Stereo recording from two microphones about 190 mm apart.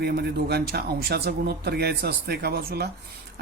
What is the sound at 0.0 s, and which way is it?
Speech, 55° right (ahead or behind).